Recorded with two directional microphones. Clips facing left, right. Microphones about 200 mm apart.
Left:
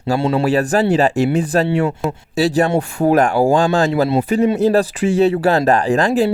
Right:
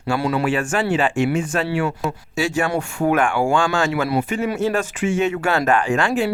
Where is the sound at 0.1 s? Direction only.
25° left (ahead or behind).